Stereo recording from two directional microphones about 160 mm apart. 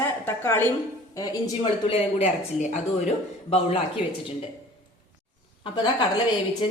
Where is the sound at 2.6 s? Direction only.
50° left (ahead or behind).